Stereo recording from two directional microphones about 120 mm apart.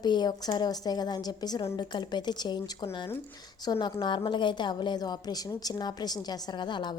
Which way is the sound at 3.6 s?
35° left (ahead or behind).